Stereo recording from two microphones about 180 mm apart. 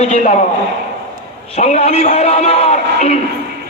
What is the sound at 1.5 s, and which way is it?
A man's voice, 35° left (ahead or behind).